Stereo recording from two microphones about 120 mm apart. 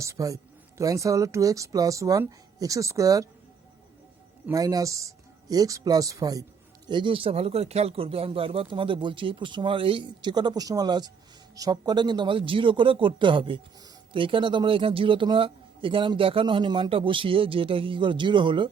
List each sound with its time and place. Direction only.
0.0 s speech: 25° right (ahead or behind)
4.5 s speech: 30° right (ahead or behind)
6.8 s a man's voice: 40° right (ahead or behind)